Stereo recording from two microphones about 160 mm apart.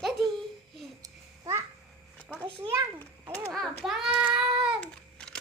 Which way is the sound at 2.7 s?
15° right (ahead or behind).